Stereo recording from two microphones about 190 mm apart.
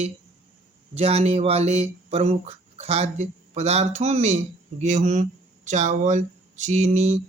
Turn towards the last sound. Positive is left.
turn(degrees=-35)  # may be behind; listen again after turning